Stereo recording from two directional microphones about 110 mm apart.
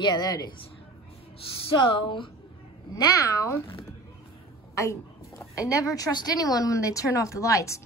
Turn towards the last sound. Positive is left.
turn(degrees=30)  # may be behind; listen again after turning